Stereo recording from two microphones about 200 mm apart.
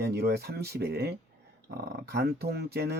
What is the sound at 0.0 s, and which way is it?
Speech, 55° right (ahead or behind).